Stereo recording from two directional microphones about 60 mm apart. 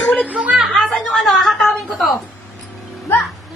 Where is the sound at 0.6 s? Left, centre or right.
Centre.